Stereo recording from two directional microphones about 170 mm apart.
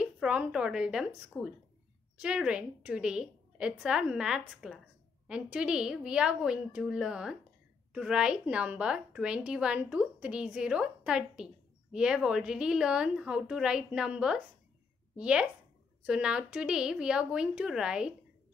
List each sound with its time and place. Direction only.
0.0 s a woman's voice: 5° right (ahead or behind)